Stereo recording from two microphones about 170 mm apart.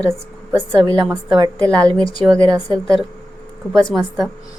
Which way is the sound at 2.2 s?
5° left (ahead or behind).